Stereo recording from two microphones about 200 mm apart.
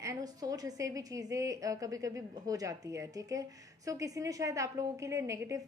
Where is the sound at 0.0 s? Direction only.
20° right (ahead or behind).